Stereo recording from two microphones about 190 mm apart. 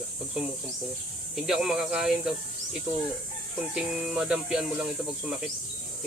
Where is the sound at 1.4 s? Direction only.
Centre (ahead or behind).